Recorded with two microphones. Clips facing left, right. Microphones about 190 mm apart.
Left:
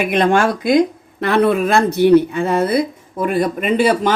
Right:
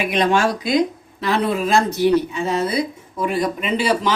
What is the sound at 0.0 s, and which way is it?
Speech, 55° left (ahead or behind).